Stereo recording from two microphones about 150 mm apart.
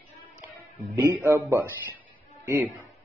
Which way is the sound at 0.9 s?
15° right (ahead or behind).